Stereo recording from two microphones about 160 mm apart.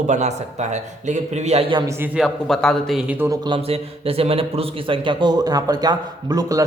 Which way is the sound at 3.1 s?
10° right (ahead or behind).